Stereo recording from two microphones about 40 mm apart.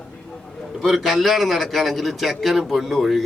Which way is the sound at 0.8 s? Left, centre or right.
Centre.